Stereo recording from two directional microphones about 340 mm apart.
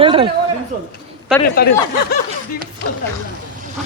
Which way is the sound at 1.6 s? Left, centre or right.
Left.